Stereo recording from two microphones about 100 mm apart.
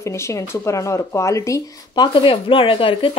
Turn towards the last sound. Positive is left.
turn(degrees=60)  # may be behind; listen again after turning